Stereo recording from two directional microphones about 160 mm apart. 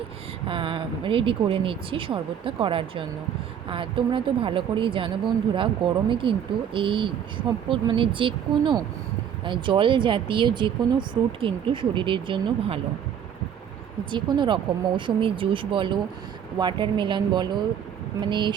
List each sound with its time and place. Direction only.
0.4 s speech: 35° right (ahead or behind)
14.1 s speech: 30° right (ahead or behind)